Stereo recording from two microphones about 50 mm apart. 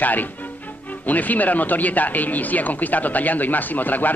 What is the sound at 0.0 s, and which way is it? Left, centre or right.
Speech, left.